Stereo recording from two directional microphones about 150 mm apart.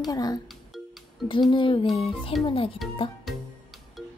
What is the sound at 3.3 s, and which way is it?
Speech, centre (ahead or behind).